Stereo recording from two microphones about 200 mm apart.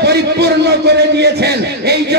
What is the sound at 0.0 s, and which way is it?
Music, 55° right (ahead or behind).